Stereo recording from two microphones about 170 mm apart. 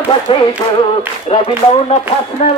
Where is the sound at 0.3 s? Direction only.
30° left (ahead or behind).